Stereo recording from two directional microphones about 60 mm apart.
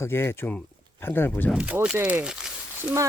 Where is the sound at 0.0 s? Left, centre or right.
Left.